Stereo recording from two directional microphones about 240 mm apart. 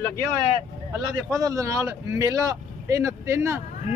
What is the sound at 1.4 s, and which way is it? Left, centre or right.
Speech, centre.